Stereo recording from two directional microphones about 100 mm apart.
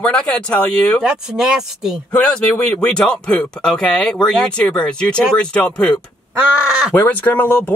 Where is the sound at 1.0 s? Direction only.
5° right (ahead or behind).